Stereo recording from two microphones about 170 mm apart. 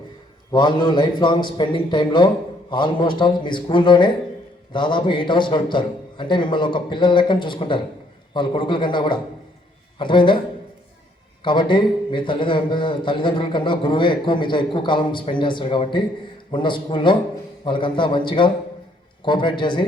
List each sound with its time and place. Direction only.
0.5 s a man's voice: 25° left (ahead or behind)
11.4 s a man's voice: 30° left (ahead or behind)